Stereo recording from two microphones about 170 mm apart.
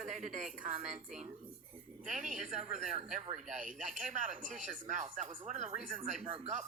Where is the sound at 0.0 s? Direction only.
45° right (ahead or behind).